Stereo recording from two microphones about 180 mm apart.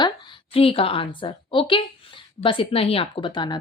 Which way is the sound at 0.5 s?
30° left (ahead or behind).